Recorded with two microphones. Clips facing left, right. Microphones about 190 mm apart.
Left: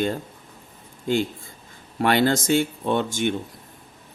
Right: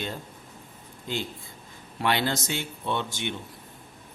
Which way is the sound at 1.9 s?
50° left (ahead or behind).